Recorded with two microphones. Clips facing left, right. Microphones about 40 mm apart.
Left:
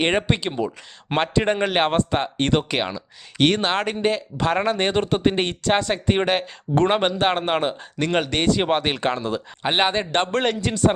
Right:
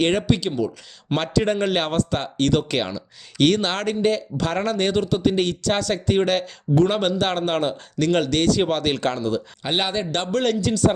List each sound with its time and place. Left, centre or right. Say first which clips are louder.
0.0 s speech: right 1 dB; left